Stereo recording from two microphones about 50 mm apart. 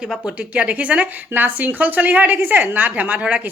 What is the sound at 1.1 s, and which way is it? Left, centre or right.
Speech, right.